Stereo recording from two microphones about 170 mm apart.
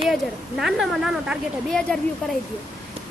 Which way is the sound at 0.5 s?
Centre (ahead or behind).